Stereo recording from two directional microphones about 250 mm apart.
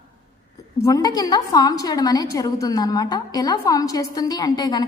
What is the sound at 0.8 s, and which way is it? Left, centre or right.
A woman's voice, centre.